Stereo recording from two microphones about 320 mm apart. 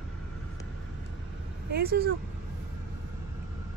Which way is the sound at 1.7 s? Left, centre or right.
Right.